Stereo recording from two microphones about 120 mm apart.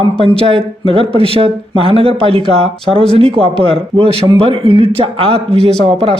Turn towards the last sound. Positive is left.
turn(degrees=-55)  # may be behind; listen again after turning